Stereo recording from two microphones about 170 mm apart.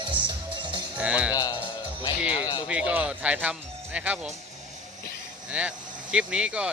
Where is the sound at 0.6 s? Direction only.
25° right (ahead or behind).